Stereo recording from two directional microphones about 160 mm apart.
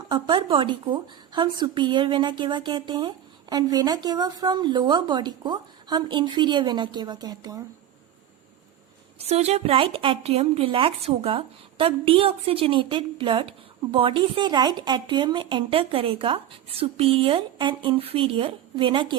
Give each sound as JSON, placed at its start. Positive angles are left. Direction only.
{"t": 0.1, "sound": "a woman's voice", "side_deg": -30}
{"t": 9.1, "sound": "speech", "side_deg": -40}